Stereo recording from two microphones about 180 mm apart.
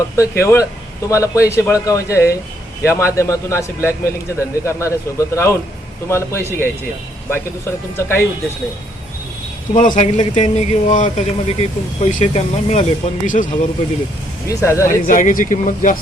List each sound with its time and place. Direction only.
0.2 s a man's voice: 15° left (ahead or behind)
9.7 s speech: 45° left (ahead or behind)
14.4 s a man's voice: 15° left (ahead or behind)
14.8 s speech: 50° left (ahead or behind)